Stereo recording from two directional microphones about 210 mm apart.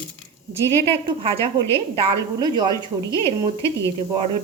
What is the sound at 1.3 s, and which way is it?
Speech, 15° left (ahead or behind).